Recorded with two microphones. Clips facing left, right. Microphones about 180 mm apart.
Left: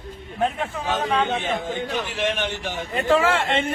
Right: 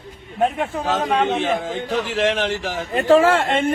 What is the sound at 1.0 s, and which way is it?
Speech, 40° right (ahead or behind).